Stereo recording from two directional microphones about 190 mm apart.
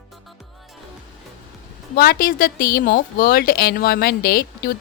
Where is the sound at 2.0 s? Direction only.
50° left (ahead or behind).